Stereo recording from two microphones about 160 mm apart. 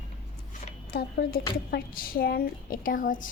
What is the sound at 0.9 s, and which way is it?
Speech, 75° left (ahead or behind).